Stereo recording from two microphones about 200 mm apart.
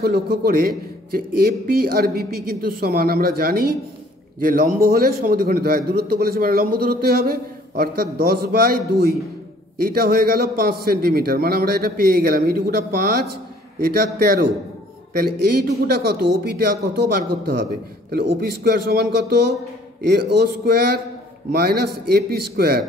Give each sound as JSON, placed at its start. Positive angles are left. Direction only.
{"t": 0.0, "sound": "a man's voice", "side_deg": -50}